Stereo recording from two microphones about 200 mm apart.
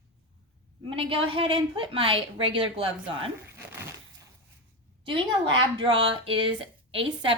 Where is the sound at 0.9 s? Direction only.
25° right (ahead or behind).